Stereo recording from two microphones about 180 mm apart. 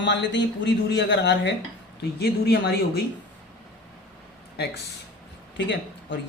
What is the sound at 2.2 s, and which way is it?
Speech, 65° left (ahead or behind).